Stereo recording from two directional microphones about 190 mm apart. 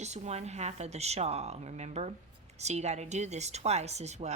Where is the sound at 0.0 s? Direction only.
35° right (ahead or behind).